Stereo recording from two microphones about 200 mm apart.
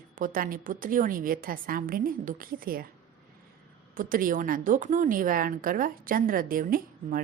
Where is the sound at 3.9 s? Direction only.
45° right (ahead or behind).